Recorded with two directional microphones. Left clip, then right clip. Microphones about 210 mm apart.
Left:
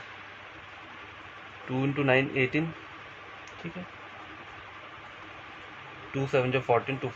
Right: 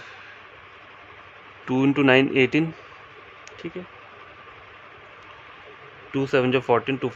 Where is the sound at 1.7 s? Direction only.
50° right (ahead or behind).